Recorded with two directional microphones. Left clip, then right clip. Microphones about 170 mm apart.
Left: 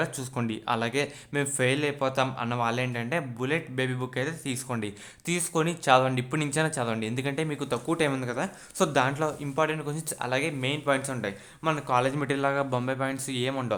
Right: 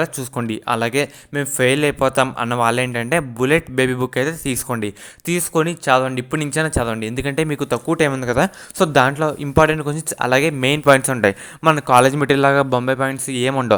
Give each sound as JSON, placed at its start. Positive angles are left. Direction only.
{"t": 0.0, "sound": "speech", "side_deg": -30}